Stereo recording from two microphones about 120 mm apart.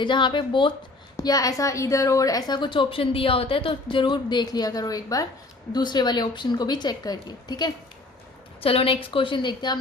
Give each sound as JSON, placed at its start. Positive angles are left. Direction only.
{"t": 0.0, "sound": "a woman's voice", "side_deg": 40}
{"t": 1.1, "sound": "a woman's voice", "side_deg": 30}
{"t": 8.6, "sound": "a woman's voice", "side_deg": 50}